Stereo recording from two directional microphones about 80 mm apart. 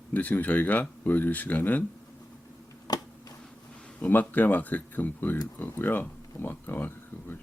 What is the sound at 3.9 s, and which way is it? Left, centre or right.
Speech, left.